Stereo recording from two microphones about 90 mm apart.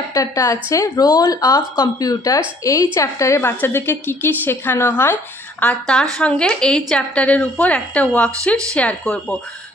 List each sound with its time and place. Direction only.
0.1 s speech: 40° left (ahead or behind); by 5.8 s 20° left (ahead or behind)
6.1 s a woman's voice: 10° left (ahead or behind)